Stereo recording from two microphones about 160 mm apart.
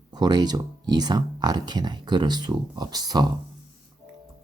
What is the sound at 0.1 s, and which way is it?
Speech, 25° right (ahead or behind).